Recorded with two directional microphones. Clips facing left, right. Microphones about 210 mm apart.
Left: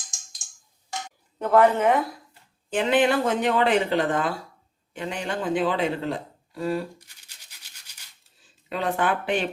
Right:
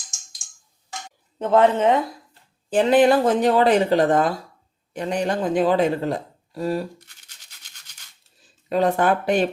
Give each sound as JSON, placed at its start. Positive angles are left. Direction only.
{"t": 1.4, "sound": "speech", "side_deg": -25}
{"t": 2.6, "sound": "speech", "side_deg": -35}
{"t": 7.6, "sound": "music", "side_deg": 10}
{"t": 8.7, "sound": "speech", "side_deg": -40}